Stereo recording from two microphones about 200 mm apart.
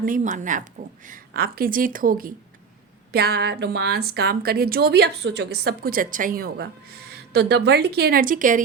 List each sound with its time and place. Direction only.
0.0 s speech: 40° right (ahead or behind)